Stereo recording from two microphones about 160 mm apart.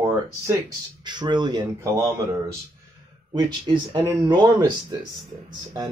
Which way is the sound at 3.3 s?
30° right (ahead or behind).